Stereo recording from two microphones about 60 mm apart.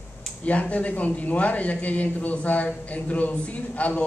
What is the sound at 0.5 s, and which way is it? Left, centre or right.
A man's voice, left.